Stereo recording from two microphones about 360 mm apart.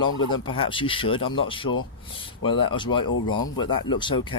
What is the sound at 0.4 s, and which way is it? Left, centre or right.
Speech, centre.